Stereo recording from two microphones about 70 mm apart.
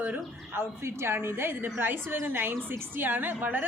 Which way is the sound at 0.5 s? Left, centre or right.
Right.